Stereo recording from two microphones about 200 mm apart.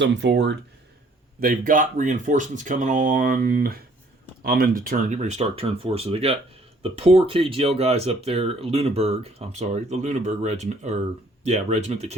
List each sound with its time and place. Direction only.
0.0 s speech: 60° right (ahead or behind)
1.4 s speech: 45° right (ahead or behind)